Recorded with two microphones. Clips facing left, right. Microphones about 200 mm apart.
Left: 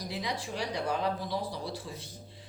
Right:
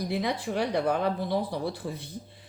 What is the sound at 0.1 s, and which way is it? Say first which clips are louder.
Speech: right 5 dB; 55° right (ahead or behind).